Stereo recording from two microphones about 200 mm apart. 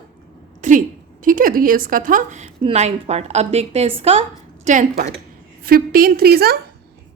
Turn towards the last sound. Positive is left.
turn(degrees=-50)  # may be behind; listen again after turning